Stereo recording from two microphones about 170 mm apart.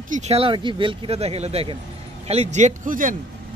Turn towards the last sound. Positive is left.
turn(degrees=-50)  # may be behind; listen again after turning